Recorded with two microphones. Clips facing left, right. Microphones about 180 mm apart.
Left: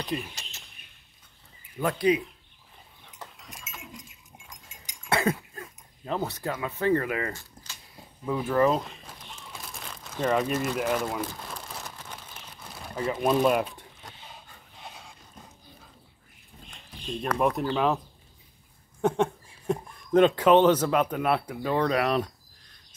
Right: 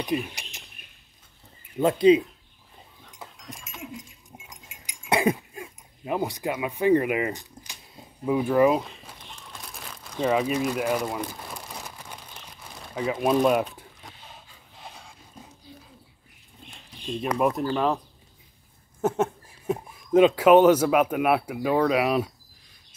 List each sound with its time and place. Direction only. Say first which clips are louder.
0.4 s bird: right 2 dB; 15° right (ahead or behind)
1.8 s speech: right 7 dB; 25° right (ahead or behind)
3.2 s dog: right 3 dB; centre (ahead or behind)
4.5 s a sound: right 2 dB; 10° right (ahead or behind)
8.8 s crumpling: even; centre (ahead or behind)
12.9 s a sound: right 2 dB; centre (ahead or behind)
14.8 s dog: right 1 dB; centre (ahead or behind)
17.4 s speech: right 1 dB; 5° right (ahead or behind)